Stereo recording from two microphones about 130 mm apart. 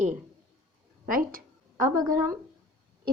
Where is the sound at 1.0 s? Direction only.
90° right.